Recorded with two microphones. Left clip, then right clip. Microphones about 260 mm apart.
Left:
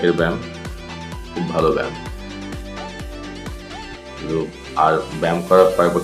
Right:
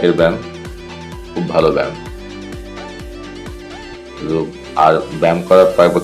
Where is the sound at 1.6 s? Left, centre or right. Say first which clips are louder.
Right 5 dB; centre.